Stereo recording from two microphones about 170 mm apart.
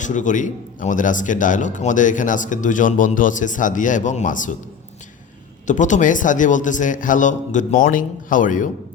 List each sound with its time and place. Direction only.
0.0 s speech: 45° left (ahead or behind)
5.6 s speech: 45° left (ahead or behind)